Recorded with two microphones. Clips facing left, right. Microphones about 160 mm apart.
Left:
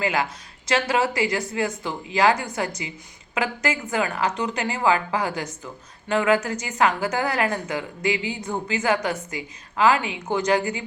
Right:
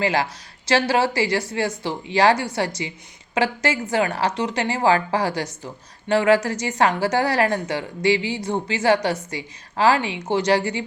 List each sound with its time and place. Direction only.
0.0 s speech: 35° right (ahead or behind)